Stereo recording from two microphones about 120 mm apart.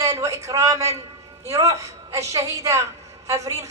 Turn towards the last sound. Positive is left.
turn(degrees=-25)  # may be behind; listen again after turning